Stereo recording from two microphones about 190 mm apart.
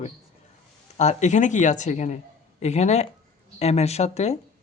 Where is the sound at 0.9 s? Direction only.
40° left (ahead or behind).